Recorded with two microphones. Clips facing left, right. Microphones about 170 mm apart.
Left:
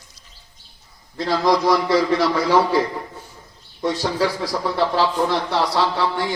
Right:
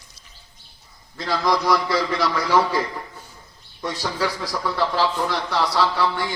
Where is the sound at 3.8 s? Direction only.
30° left (ahead or behind).